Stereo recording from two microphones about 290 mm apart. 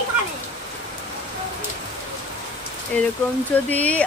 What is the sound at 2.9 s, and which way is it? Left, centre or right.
Speech, centre.